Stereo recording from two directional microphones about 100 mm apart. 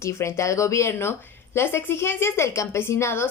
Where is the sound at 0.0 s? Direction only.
25° left (ahead or behind).